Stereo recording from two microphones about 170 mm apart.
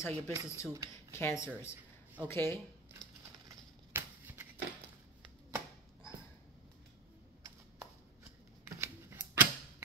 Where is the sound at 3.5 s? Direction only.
15° right (ahead or behind).